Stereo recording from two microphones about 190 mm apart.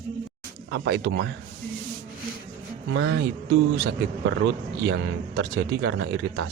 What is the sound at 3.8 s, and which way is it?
Speech, 70° right (ahead or behind).